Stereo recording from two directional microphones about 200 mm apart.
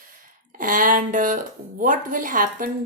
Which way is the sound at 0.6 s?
40° right (ahead or behind).